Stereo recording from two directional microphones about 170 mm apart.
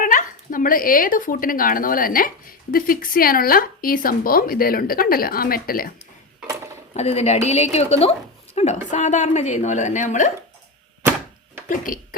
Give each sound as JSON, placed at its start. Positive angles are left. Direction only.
{"t": 0.0, "sound": "speech", "side_deg": 50}
{"t": 6.9, "sound": "a woman's voice", "side_deg": 40}
{"t": 8.5, "sound": "a sound", "side_deg": 40}
{"t": 8.9, "sound": "speech", "side_deg": 45}
{"t": 11.7, "sound": "speech", "side_deg": 50}